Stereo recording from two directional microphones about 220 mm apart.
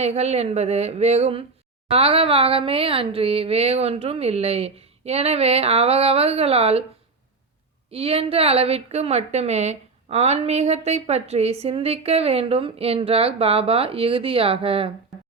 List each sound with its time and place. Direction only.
0.0 s a woman's voice: 30° right (ahead or behind)
7.9 s a woman's voice: 25° right (ahead or behind)